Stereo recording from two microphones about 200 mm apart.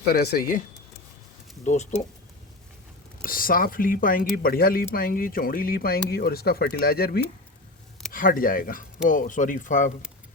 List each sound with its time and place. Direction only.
0.1 s speech: 55° left (ahead or behind)
1.6 s speech: 35° left (ahead or behind)
3.2 s speech: 45° left (ahead or behind)